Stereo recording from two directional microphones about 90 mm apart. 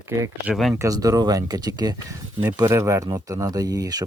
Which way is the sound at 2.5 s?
35° right (ahead or behind).